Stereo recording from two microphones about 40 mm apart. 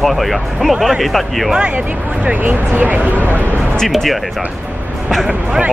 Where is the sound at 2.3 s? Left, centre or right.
Right.